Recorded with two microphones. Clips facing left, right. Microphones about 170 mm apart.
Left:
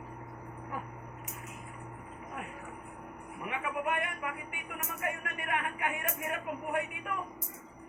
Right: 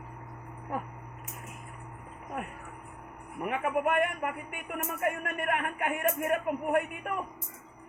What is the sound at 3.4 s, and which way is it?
Speech, 50° right (ahead or behind).